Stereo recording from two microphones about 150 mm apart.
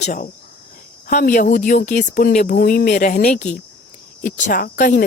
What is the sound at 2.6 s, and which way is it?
Speech, 85° left.